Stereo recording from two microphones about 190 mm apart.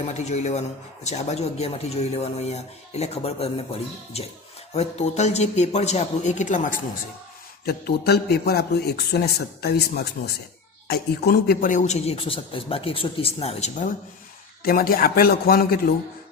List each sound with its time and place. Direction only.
0.1 s speech: 35° left (ahead or behind)
7.6 s a man's voice: 55° left (ahead or behind); by 13.8 s 35° left (ahead or behind)
14.6 s a man's voice: 50° left (ahead or behind)